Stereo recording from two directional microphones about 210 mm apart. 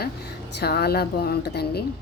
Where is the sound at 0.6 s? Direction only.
50° left (ahead or behind).